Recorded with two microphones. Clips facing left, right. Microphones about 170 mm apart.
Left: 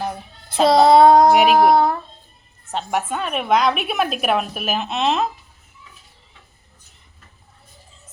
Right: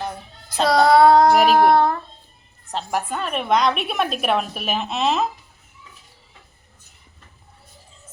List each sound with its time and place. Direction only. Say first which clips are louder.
0.7 s female singing: left 2 dB; 25° left (ahead or behind)
1.3 s a woman's voice: left 1 dB; 5° left (ahead or behind)